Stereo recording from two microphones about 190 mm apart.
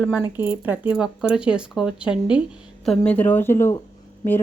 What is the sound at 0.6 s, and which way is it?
A woman's voice, 10° right (ahead or behind).